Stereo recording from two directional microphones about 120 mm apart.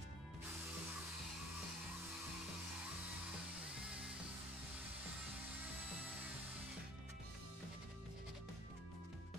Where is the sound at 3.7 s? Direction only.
10° right (ahead or behind).